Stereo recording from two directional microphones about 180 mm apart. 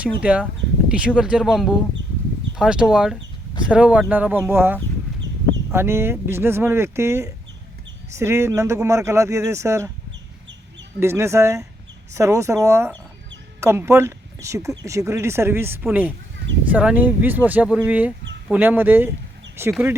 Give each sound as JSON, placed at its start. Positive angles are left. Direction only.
{"t": 0.0, "sound": "speech", "side_deg": -5}
{"t": 11.0, "sound": "speech", "side_deg": -15}